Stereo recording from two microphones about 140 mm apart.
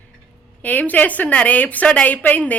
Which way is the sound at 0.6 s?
10° left (ahead or behind).